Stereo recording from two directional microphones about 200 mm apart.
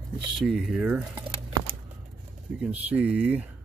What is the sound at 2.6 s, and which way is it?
Speech, 5° right (ahead or behind).